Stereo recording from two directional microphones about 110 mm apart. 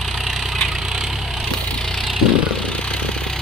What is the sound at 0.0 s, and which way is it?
Vehicle, centre (ahead or behind).